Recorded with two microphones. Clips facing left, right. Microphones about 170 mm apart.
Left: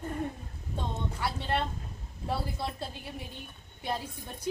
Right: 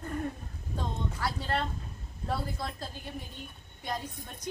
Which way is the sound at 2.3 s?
30° left (ahead or behind).